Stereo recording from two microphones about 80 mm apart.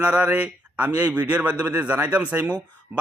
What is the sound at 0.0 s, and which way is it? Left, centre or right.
A man's voice, centre.